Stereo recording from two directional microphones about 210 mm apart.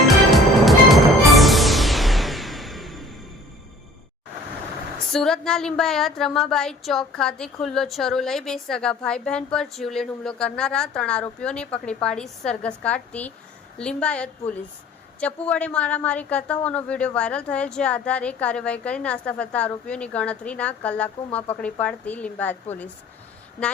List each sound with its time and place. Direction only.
0.3 s music: centre (ahead or behind)
5.1 s a woman's voice: centre (ahead or behind)